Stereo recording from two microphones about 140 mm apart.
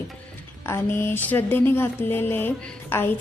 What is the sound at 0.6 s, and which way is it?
A woman's voice, 15° left (ahead or behind).